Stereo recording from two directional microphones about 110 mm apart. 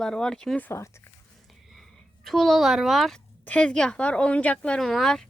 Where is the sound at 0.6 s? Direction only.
25° left (ahead or behind).